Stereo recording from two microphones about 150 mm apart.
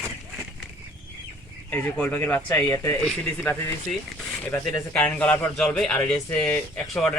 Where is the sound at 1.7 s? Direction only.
10° left (ahead or behind).